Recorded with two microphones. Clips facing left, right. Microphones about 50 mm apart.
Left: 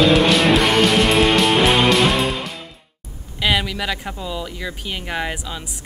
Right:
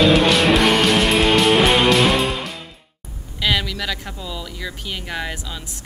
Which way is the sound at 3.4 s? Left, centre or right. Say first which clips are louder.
Left 1 dB; centre.